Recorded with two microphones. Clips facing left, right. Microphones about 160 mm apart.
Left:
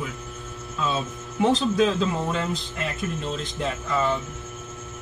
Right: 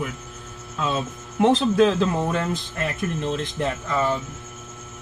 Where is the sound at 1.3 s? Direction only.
60° right (ahead or behind).